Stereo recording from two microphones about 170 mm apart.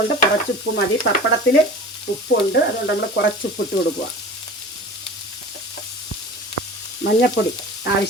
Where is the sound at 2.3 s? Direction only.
90° left.